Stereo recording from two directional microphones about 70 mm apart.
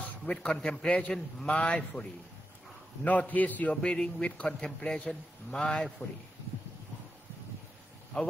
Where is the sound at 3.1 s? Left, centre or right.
Left.